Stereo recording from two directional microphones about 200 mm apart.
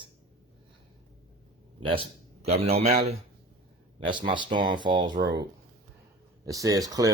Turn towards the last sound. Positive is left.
turn(degrees=-20)  # may be behind; listen again after turning